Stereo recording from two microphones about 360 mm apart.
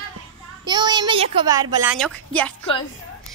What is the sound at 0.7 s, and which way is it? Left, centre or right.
A woman's voice, centre.